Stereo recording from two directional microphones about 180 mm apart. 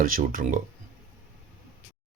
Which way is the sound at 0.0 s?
50° right (ahead or behind).